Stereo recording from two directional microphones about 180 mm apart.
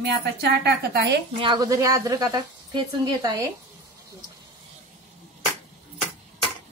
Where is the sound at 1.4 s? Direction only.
20° right (ahead or behind).